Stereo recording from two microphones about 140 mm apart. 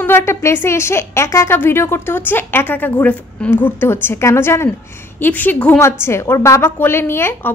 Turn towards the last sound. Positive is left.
turn(degrees=15)  # may be behind; listen again after turning